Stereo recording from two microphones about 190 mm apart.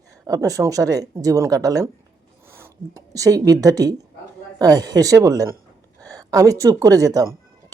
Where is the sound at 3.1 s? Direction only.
15° right (ahead or behind).